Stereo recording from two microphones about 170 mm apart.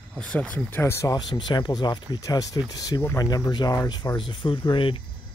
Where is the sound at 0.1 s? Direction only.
5° left (ahead or behind).